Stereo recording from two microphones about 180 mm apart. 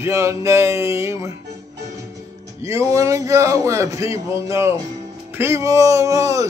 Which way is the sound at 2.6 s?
15° right (ahead or behind).